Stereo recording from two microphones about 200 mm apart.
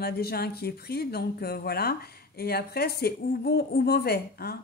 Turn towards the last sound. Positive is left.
turn(degrees=50)  # may be behind; listen again after turning